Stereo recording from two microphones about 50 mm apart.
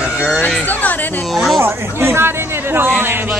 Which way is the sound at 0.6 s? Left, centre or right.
Left.